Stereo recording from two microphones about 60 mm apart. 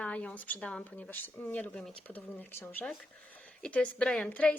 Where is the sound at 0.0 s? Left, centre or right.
Centre.